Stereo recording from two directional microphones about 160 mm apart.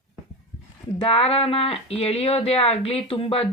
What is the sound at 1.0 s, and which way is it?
Speech, 35° left (ahead or behind).